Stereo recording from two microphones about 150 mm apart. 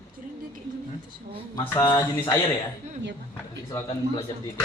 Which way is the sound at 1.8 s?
30° left (ahead or behind).